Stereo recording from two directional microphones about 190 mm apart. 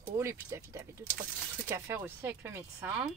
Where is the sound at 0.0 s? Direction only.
15° right (ahead or behind).